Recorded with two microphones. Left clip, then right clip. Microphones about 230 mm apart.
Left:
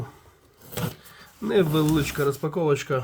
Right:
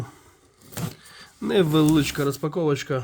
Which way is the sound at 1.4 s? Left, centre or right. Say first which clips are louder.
Right 2 dB; right.